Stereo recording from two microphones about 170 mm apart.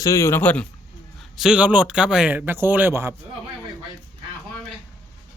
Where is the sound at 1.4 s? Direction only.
5° right (ahead or behind).